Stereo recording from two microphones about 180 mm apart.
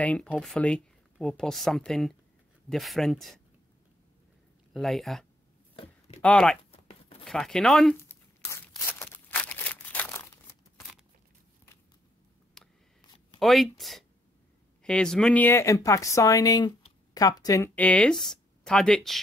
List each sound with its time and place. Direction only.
0.0 s speech: 5° left (ahead or behind)
4.7 s speech: centre (ahead or behind)
5.8 s a sound: 35° left (ahead or behind)
6.2 s speech: 5° left (ahead or behind)
6.7 s chopping: 35° left (ahead or behind)
7.2 s speech: centre (ahead or behind)
8.5 s a sound: 15° left (ahead or behind)
12.6 s a sound: centre (ahead or behind)
13.4 s speech: centre (ahead or behind); by 17.6 s 20° left (ahead or behind)
17.7 s speech: 5° left (ahead or behind)